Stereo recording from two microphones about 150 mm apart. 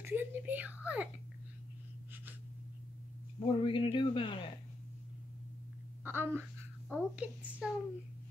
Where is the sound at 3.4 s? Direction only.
35° left (ahead or behind).